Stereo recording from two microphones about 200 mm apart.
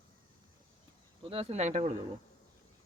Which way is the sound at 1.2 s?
30° right (ahead or behind).